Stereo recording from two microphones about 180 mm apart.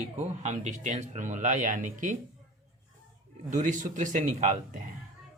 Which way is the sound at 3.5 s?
45° right (ahead or behind).